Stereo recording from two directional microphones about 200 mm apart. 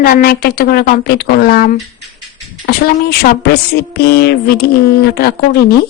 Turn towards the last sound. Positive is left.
turn(degrees=55)  # may be behind; listen again after turning